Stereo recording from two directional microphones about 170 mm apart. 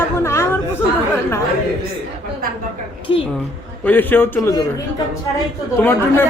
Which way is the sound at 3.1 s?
35° left (ahead or behind).